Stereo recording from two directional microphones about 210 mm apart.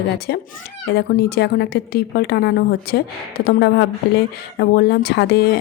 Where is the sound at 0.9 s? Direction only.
50° left (ahead or behind).